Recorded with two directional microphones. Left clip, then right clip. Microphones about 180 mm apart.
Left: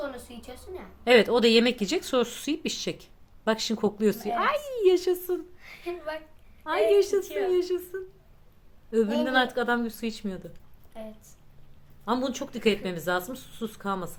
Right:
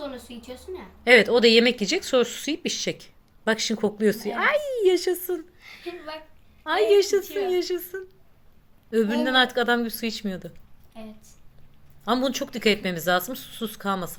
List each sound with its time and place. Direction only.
1.0 s speech: centre (ahead or behind)
6.7 s speech: 20° right (ahead or behind)
7.2 s speech: 50° left (ahead or behind)
7.4 s speech: 20° right (ahead or behind)
10.9 s a woman's voice: 50° left (ahead or behind)
12.0 s speech: 20° right (ahead or behind)